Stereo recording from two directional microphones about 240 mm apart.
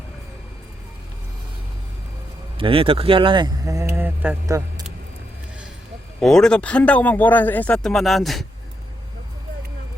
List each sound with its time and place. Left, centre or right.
2.6 s speech: right
6.1 s speech: centre